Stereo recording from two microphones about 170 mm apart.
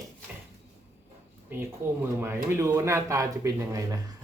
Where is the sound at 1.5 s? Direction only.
10° right (ahead or behind).